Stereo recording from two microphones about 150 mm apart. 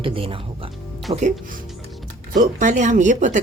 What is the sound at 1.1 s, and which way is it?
Speech, 50° right (ahead or behind).